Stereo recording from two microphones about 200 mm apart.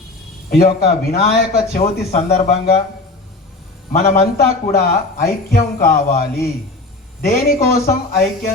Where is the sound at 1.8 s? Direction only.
30° left (ahead or behind).